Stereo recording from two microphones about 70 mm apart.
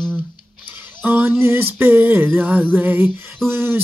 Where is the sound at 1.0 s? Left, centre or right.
Right.